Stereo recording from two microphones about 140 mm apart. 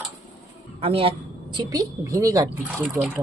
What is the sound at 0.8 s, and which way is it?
Speech, 45° right (ahead or behind).